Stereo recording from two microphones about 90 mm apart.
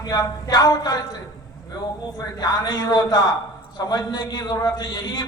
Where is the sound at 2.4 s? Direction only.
50° left (ahead or behind).